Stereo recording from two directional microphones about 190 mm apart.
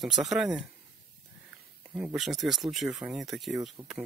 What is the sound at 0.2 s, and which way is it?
Speech, 5° right (ahead or behind).